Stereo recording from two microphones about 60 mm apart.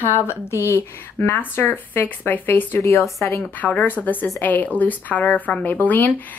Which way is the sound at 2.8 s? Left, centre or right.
Left.